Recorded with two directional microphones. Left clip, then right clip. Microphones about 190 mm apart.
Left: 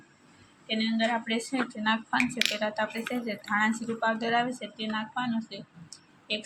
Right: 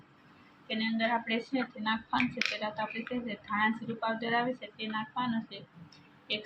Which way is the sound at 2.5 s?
35° left (ahead or behind).